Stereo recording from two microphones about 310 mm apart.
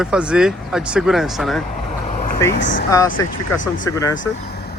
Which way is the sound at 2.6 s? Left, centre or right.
Left.